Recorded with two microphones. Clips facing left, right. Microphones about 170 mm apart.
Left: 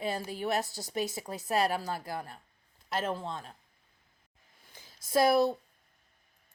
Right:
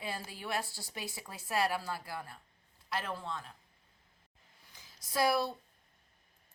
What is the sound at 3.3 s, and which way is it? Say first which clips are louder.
Speech: left 2 dB; 25° left (ahead or behind).